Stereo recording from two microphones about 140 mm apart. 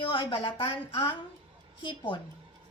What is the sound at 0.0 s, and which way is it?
Speech, 35° left (ahead or behind).